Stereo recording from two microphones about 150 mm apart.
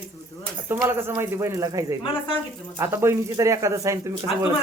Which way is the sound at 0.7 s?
15° right (ahead or behind).